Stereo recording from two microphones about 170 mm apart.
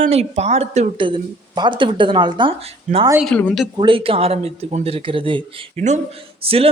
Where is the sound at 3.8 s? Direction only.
30° right (ahead or behind).